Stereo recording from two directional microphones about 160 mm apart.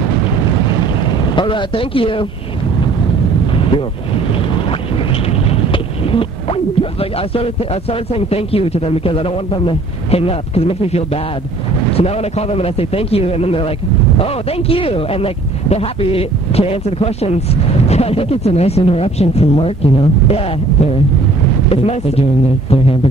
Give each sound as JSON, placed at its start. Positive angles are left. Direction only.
{"t": 1.3, "sound": "speech", "side_deg": 30}
{"t": 5.7, "sound": "speech", "side_deg": 35}